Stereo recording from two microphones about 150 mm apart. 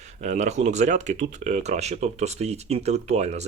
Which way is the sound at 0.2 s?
50° right (ahead or behind).